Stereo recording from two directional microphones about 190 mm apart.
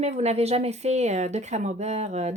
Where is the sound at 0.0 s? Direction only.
35° right (ahead or behind).